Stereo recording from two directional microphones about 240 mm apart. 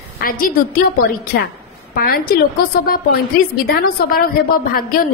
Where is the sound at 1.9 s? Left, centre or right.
Left.